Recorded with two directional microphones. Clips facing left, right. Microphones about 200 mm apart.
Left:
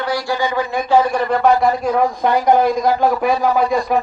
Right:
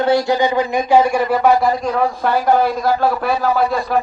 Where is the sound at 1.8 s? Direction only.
15° left (ahead or behind).